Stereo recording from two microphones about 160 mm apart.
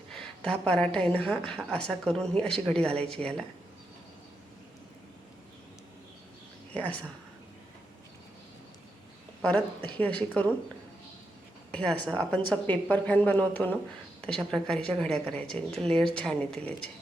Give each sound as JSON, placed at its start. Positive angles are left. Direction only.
{"t": 0.1, "sound": "a sound", "side_deg": 5}
{"t": 0.9, "sound": "speech", "side_deg": 5}
{"t": 6.7, "sound": "speech", "side_deg": 10}
{"t": 9.4, "sound": "speech", "side_deg": 10}
{"t": 11.7, "sound": "speech", "side_deg": 5}